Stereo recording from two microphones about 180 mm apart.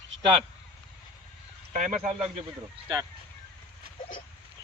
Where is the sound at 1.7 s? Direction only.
45° right (ahead or behind).